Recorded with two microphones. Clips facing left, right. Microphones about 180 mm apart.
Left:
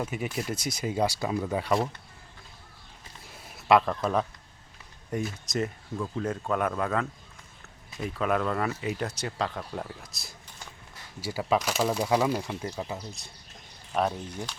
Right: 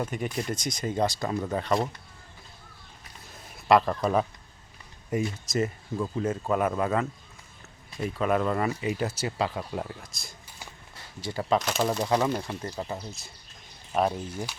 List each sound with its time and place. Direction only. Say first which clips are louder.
0.0 s speech: right 1 dB; 5° left (ahead or behind)
3.3 s a sound: right 1 dB; 5° left (ahead or behind)
5.1 s speech: right 3 dB; 5° right (ahead or behind)